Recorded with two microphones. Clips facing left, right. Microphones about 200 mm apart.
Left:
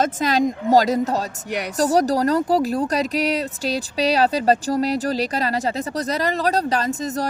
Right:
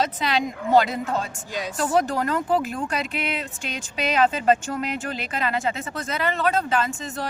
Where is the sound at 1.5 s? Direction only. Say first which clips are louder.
Left 4 dB; 70° left (ahead or behind).